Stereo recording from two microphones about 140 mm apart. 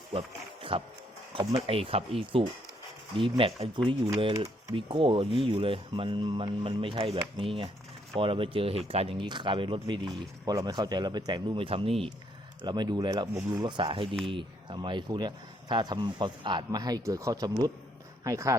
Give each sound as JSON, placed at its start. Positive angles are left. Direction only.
{"t": 0.1, "sound": "speech", "side_deg": -40}
{"t": 12.6, "sound": "speech", "side_deg": -30}